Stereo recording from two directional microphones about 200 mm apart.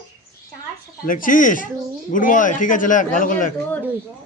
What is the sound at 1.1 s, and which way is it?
Speech, 45° left (ahead or behind).